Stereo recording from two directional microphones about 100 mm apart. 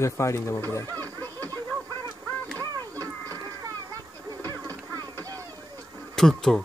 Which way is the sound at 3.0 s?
35° right (ahead or behind).